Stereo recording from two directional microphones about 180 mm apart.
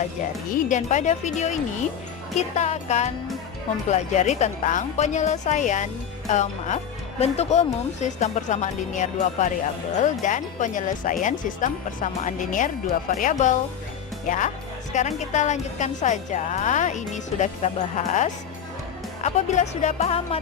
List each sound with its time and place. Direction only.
0.2 s speech: 45° left (ahead or behind)